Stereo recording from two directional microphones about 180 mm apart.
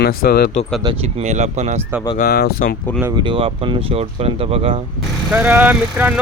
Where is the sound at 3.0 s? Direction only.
20° right (ahead or behind).